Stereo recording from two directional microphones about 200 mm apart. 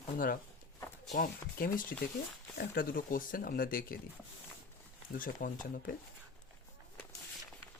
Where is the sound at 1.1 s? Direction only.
45° left (ahead or behind).